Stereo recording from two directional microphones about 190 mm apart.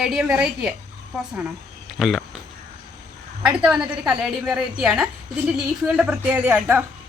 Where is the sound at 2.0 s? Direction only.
Centre (ahead or behind).